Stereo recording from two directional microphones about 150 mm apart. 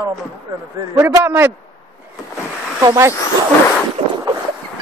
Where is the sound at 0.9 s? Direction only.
15° right (ahead or behind).